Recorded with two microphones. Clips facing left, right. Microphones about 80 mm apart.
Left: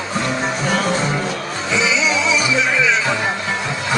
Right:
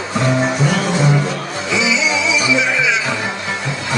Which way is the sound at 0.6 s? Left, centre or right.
Left.